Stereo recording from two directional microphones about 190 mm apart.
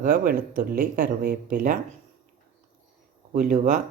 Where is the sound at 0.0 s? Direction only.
50° right (ahead or behind).